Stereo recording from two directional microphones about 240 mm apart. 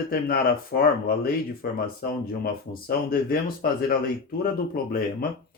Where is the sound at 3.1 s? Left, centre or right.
Left.